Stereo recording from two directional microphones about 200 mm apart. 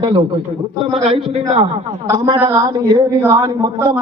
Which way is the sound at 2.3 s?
15° right (ahead or behind).